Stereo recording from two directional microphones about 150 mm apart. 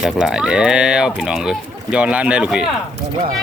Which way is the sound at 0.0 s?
5° right (ahead or behind).